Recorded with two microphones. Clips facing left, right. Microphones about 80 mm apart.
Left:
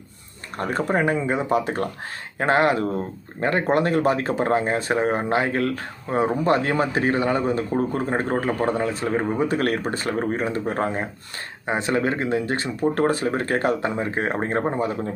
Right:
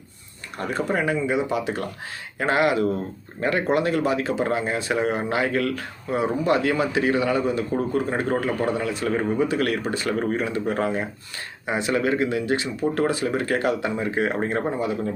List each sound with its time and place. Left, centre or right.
0.5 s speech: left
9.0 s speech: left
9.5 s speech: left